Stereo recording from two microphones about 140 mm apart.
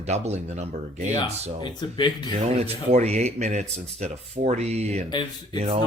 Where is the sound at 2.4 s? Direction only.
50° right (ahead or behind).